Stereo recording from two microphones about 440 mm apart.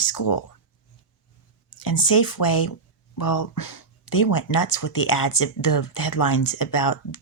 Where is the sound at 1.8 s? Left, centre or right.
Left.